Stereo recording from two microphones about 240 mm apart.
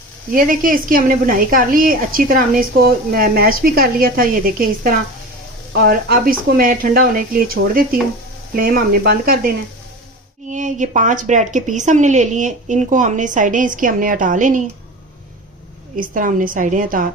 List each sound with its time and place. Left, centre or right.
0.3 s a woman's voice: right
10.5 s a woman's voice: right
16.0 s a woman's voice: right